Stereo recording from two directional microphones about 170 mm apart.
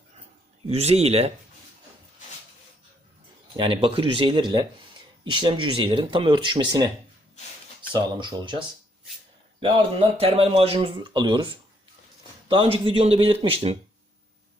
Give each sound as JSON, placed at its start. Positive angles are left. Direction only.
{"t": 0.7, "sound": "speech", "side_deg": -40}
{"t": 3.6, "sound": "speech", "side_deg": -30}